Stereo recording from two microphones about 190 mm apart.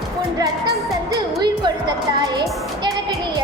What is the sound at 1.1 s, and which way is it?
Music, 20° right (ahead or behind).